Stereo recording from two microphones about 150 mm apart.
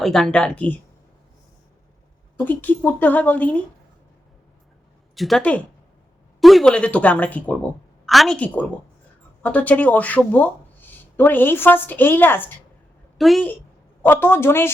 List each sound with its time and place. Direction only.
0.0 s speech: 5° left (ahead or behind)
2.4 s speech: 10° left (ahead or behind)
5.1 s a woman's voice: centre (ahead or behind)
13.1 s a woman's voice: centre (ahead or behind)
14.0 s speech: 15° left (ahead or behind)